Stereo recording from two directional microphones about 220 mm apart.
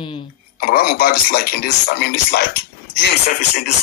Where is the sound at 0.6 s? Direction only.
45° left (ahead or behind).